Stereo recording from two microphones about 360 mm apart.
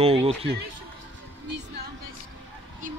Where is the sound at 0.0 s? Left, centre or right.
Centre.